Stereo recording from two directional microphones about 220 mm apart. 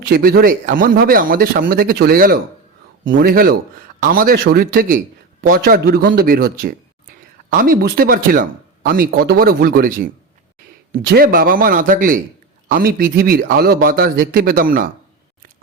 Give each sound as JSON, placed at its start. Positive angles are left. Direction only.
{"t": 0.0, "sound": "a man's voice", "side_deg": -45}